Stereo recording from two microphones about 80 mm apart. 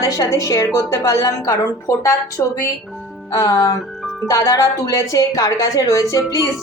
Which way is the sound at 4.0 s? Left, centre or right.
Centre.